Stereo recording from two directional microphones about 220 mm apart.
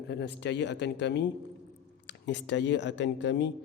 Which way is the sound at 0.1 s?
50° left (ahead or behind).